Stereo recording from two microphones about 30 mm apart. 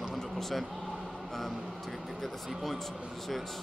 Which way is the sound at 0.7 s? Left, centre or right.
Centre.